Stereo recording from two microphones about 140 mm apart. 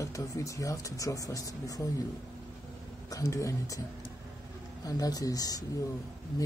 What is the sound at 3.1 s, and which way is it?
Speech, 25° left (ahead or behind).